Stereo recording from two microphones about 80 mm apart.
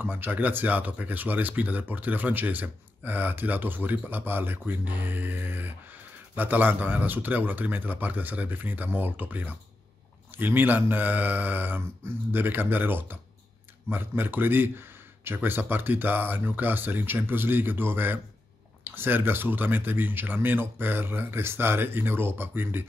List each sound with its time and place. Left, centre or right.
0.0 s speech: right